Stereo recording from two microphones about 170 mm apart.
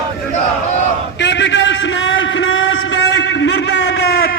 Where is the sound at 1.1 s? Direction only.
90° left.